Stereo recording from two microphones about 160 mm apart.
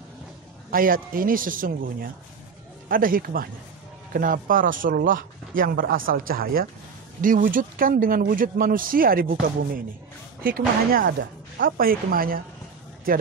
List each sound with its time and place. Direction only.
0.7 s speech: 65° right (ahead or behind)
7.2 s speech: 55° right (ahead or behind)
10.9 s speech: 75° right (ahead or behind)